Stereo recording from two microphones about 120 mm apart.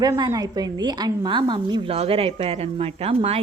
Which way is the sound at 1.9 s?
55° right (ahead or behind).